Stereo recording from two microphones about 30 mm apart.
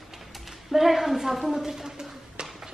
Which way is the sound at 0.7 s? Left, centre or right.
Centre.